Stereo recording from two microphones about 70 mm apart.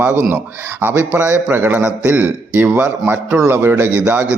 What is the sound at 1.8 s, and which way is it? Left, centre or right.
A man's voice, centre.